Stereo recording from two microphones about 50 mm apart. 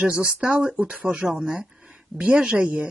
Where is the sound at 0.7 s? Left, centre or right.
Right.